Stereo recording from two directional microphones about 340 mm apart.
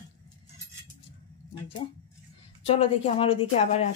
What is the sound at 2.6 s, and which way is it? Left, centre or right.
Speech, centre.